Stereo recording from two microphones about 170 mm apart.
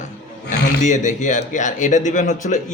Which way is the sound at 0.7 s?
50° left (ahead or behind).